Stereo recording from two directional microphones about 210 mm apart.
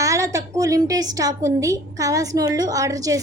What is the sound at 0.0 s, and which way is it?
A woman's voice, 15° right (ahead or behind).